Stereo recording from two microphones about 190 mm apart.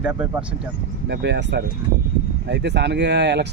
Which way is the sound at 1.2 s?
65° right (ahead or behind).